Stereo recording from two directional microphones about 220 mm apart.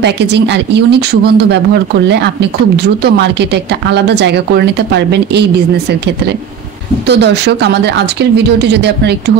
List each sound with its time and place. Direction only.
0.0 s speech: 50° right (ahead or behind)
7.1 s speech: 50° right (ahead or behind)